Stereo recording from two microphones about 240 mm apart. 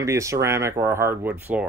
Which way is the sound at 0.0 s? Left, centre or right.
Centre.